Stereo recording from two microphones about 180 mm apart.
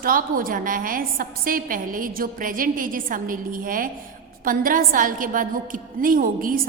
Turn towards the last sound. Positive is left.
turn(degrees=-50)  # may be behind; listen again after turning